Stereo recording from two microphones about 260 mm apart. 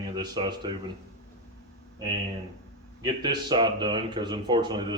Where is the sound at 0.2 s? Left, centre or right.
Centre.